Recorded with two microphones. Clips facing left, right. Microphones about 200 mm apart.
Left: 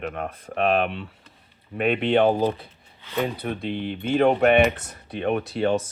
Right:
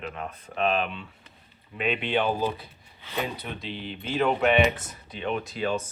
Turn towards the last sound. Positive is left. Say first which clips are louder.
# left 6 dB
turn(degrees=60)  # may be behind; listen again after turning